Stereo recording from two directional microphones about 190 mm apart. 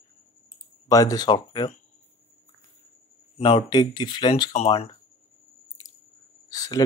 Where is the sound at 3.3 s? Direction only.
30° left (ahead or behind).